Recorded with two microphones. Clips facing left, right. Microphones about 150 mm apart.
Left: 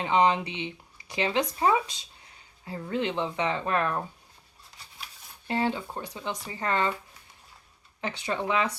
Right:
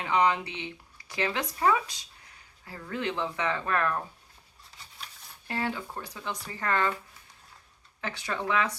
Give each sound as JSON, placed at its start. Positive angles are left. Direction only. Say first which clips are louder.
{"t": 0.0, "sound": "speech", "louder": "left 2 dB", "side_deg": 25}
{"t": 5.5, "sound": "speech", "louder": "left 4 dB", "side_deg": 20}
{"t": 8.0, "sound": "speech", "louder": "left 2 dB", "side_deg": 20}